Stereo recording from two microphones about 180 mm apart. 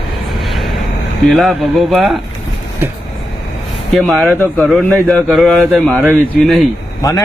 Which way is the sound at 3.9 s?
Centre (ahead or behind).